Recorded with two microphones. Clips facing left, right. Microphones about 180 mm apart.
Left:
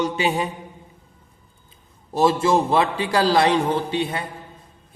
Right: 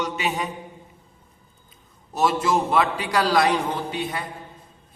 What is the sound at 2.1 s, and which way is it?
A man's voice, 30° left (ahead or behind).